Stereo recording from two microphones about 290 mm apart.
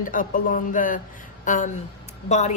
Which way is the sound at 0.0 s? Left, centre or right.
Left.